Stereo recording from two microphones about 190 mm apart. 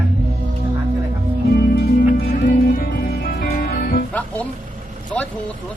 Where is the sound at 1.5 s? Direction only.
55° left (ahead or behind).